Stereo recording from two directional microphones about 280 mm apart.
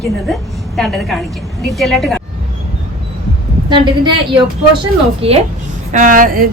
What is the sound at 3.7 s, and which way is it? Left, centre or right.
A woman's voice, centre.